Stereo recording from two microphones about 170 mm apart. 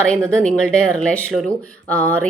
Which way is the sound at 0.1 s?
5° left (ahead or behind).